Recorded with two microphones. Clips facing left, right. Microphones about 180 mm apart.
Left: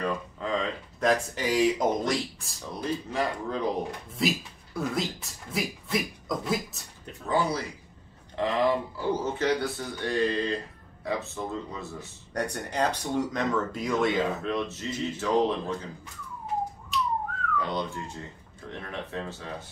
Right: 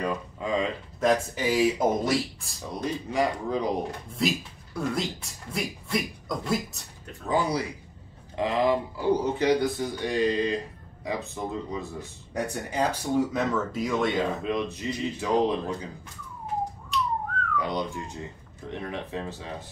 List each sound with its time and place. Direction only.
0.0 s speech: 10° right (ahead or behind)
1.0 s speech: centre (ahead or behind)
4.1 s speech: centre (ahead or behind)
7.2 s speech: 15° right (ahead or behind); by 14.4 s centre (ahead or behind)
14.4 s speech: 15° right (ahead or behind)
17.6 s speech: 15° right (ahead or behind)